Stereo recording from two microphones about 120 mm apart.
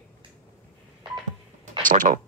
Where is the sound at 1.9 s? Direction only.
90° right.